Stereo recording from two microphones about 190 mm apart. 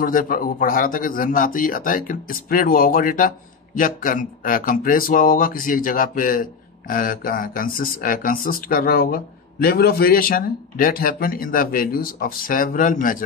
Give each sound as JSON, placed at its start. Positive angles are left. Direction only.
{"t": 0.0, "sound": "a man's voice", "side_deg": 45}